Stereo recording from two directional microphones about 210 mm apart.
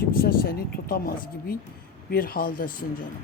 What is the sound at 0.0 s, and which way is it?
A woman's voice, 45° left (ahead or behind).